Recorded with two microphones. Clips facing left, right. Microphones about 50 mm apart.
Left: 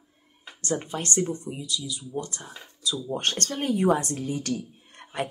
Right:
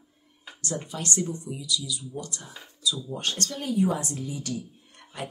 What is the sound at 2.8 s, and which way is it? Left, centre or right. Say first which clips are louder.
Speech: left 2 dB; left.